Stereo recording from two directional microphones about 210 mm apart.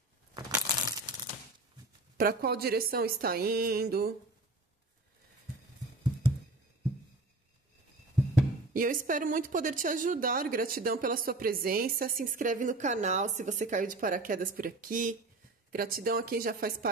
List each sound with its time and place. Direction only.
0.3 s a sound: 20° right (ahead or behind)
2.1 s speech: 45° right (ahead or behind)
8.7 s speech: 40° right (ahead or behind)